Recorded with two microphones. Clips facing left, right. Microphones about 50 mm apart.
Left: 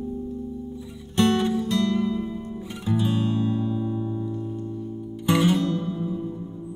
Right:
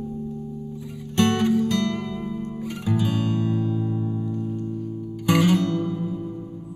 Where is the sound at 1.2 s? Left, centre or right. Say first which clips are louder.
Right 1 dB; right.